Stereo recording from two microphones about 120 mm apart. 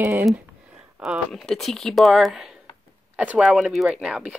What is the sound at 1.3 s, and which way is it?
Speech, 5° left (ahead or behind).